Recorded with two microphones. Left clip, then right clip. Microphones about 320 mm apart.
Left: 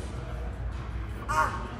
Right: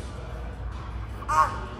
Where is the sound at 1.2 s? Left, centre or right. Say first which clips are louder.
Right 5 dB; centre.